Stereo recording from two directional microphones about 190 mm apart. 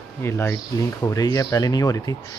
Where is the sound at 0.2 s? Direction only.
15° left (ahead or behind).